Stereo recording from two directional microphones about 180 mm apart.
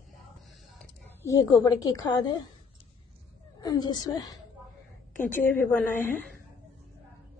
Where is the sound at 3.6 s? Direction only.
25° left (ahead or behind).